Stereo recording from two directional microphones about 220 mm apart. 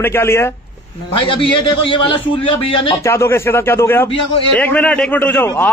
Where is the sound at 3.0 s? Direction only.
10° left (ahead or behind).